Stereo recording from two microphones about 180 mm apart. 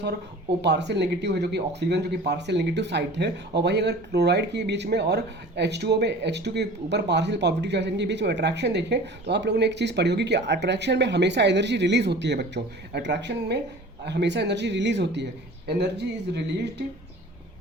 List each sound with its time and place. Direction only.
0.6 s speech: 70° right (ahead or behind)